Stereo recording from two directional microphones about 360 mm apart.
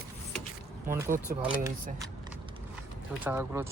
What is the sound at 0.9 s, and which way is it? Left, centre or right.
Speech, centre.